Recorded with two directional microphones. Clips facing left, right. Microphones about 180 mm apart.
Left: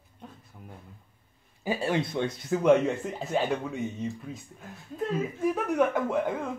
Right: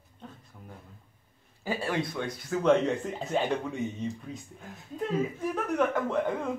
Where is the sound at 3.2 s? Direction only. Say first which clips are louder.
Left 2 dB; 5° left (ahead or behind).